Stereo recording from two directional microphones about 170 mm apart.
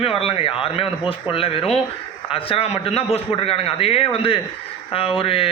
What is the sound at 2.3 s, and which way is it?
A man's voice, 35° left (ahead or behind).